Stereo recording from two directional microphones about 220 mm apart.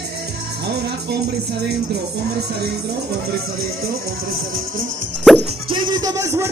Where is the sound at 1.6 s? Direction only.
50° right (ahead or behind).